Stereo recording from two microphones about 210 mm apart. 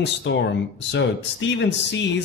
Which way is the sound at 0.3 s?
60° left (ahead or behind).